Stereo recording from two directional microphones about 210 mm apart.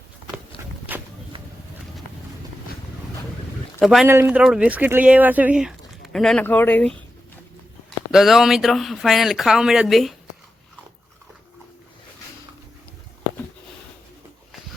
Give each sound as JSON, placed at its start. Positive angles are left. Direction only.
{"t": 0.9, "sound": "walk", "side_deg": -10}
{"t": 1.3, "sound": "a sound", "side_deg": -25}
{"t": 3.8, "sound": "speech", "side_deg": 0}